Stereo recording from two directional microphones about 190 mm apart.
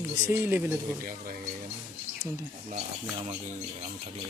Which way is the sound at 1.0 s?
45° right (ahead or behind).